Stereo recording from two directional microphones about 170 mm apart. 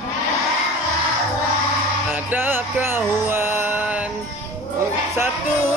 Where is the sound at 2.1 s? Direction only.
10° right (ahead or behind).